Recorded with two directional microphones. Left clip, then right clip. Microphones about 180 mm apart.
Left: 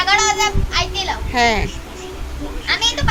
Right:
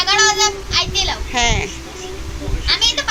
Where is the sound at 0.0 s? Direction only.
10° left (ahead or behind).